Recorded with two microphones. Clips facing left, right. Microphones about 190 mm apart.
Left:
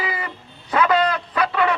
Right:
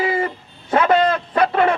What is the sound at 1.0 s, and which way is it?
Fowl, 45° right (ahead or behind).